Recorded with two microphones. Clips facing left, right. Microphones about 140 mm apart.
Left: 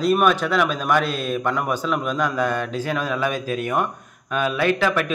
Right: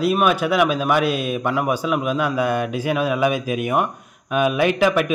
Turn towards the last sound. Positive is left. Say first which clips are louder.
# right 3 dB
turn(degrees=-15)  # may be behind; listen again after turning